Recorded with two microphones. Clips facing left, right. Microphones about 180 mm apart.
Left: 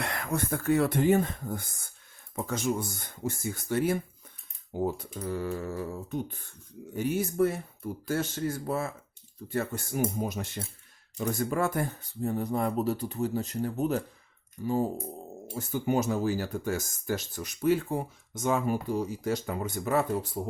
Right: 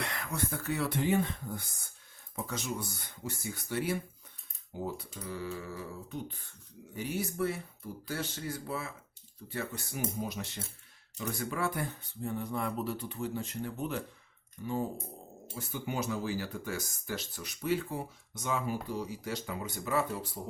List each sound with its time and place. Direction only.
0.0 s speech: 50° left (ahead or behind)